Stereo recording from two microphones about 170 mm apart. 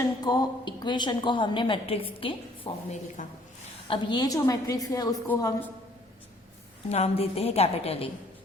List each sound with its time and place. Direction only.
0.0 s a woman's voice: 25° left (ahead or behind)
6.8 s a woman's voice: 40° left (ahead or behind)